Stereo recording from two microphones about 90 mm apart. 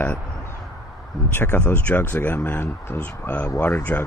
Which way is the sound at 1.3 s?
25° left (ahead or behind).